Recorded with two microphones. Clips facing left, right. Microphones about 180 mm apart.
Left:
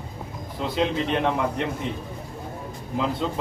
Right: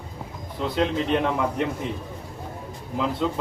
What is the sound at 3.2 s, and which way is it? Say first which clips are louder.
Speech: right 2 dB; 5° right (ahead or behind).